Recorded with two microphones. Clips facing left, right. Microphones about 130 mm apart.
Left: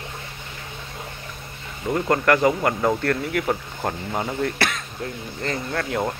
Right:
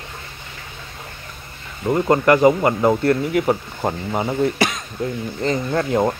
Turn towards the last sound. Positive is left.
turn(degrees=-25)  # may be behind; listen again after turning